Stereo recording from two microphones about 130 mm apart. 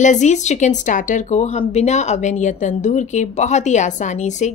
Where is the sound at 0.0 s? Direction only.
65° left (ahead or behind).